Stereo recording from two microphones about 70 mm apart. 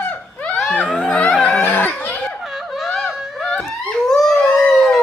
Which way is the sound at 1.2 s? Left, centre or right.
Left.